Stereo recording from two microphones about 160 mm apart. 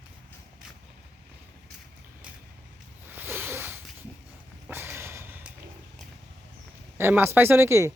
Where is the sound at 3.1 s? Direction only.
10° right (ahead or behind).